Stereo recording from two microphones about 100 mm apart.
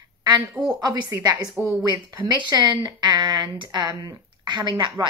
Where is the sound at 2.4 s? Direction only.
50° right (ahead or behind).